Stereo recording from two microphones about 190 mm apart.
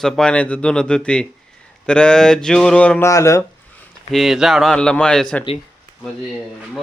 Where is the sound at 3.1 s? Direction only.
15° left (ahead or behind).